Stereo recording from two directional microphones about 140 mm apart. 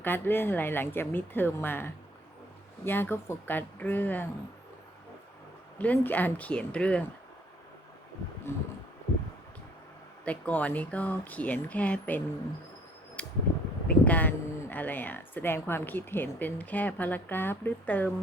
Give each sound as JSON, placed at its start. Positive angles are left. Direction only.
{"t": 0.0, "sound": "speech", "side_deg": 15}
{"t": 5.8, "sound": "speech", "side_deg": 10}
{"t": 8.5, "sound": "speech", "side_deg": 15}
{"t": 10.2, "sound": "speech", "side_deg": 10}
{"t": 13.2, "sound": "mechanical fan", "side_deg": 10}
{"t": 13.8, "sound": "speech", "side_deg": 10}